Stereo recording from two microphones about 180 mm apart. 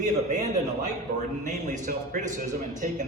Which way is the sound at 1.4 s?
45° right (ahead or behind).